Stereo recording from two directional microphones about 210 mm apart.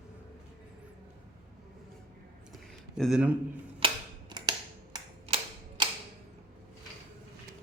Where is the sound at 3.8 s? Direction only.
25° right (ahead or behind).